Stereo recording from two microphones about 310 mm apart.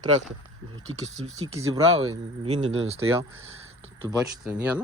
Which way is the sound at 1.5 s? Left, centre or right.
Centre.